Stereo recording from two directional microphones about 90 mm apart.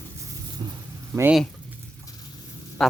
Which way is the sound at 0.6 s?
50° right (ahead or behind).